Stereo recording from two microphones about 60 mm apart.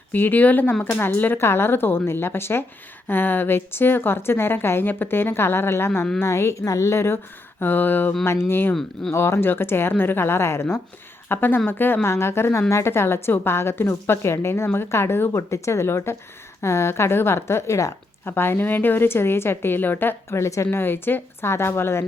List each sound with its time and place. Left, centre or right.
0.1 s a woman's voice: left
7.6 s a woman's voice: left
8.2 s a woman's voice: left
11.3 s a woman's voice: left
12.0 s a woman's voice: left
18.3 s a woman's voice: left
20.3 s a woman's voice: left
20.7 s a woman's voice: left